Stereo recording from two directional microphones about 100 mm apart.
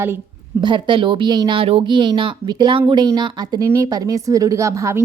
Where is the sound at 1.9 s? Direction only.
50° right (ahead or behind).